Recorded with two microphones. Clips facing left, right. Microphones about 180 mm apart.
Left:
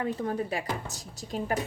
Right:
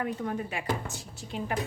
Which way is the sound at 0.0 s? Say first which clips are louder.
Left 2 dB; 35° left (ahead or behind).